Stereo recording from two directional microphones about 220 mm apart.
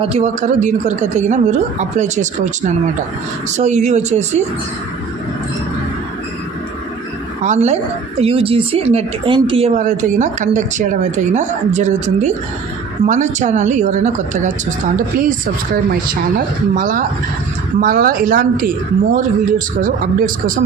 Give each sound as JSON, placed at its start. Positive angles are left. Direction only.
{"t": 0.0, "sound": "a woman's voice", "side_deg": -30}
{"t": 3.6, "sound": "a woman's voice", "side_deg": -30}
{"t": 7.4, "sound": "a woman's voice", "side_deg": -30}
{"t": 16.7, "sound": "a woman's voice", "side_deg": -40}